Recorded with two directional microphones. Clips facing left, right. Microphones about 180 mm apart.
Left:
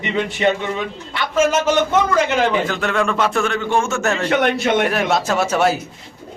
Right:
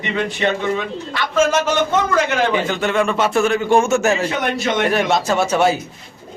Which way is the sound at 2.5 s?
Centre (ahead or behind).